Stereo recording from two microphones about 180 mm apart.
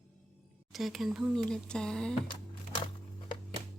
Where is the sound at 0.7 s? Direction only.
Centre (ahead or behind).